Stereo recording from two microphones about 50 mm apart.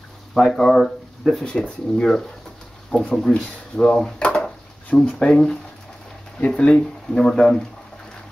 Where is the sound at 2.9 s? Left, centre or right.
Left.